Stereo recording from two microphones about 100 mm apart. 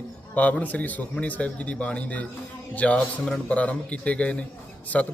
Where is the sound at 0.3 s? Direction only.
15° left (ahead or behind).